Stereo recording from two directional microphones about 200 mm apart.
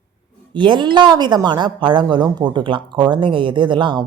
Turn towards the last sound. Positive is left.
turn(degrees=-25)  # may be behind; listen again after turning